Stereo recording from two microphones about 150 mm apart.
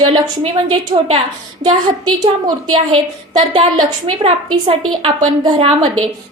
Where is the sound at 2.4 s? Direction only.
35° right (ahead or behind).